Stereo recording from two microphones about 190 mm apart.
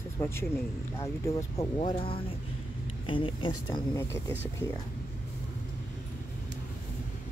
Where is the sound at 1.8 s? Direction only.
30° left (ahead or behind).